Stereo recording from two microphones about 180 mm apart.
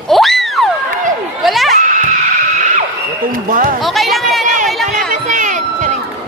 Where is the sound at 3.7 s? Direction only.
Centre (ahead or behind).